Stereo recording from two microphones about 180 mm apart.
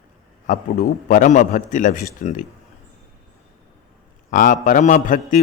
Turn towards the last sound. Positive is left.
turn(degrees=45)  # may be behind; listen again after turning